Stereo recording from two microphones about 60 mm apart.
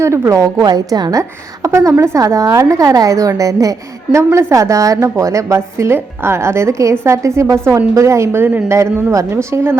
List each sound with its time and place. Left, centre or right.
0.0 s a woman's voice: right
1.7 s a woman's voice: right
4.1 s a woman's voice: right